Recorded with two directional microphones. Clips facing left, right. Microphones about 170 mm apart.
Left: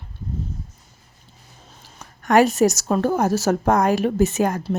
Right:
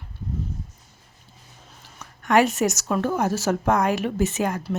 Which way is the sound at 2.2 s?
40° left (ahead or behind).